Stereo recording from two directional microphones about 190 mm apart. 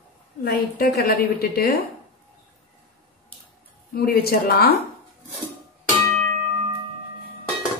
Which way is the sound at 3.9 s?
55° left (ahead or behind).